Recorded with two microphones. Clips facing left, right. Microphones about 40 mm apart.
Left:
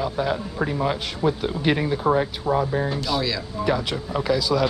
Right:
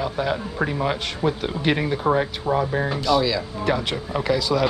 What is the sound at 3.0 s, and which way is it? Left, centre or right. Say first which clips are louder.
Speech: right 5 dB; centre.